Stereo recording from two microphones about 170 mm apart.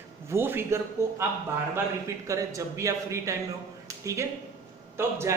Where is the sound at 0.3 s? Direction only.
15° right (ahead or behind).